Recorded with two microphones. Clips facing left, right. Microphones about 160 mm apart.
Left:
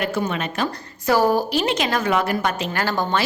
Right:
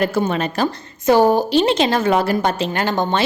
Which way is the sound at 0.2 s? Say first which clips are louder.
Right 5 dB; 35° right (ahead or behind).